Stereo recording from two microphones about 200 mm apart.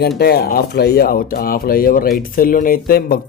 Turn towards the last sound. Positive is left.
turn(degrees=50)  # may be behind; listen again after turning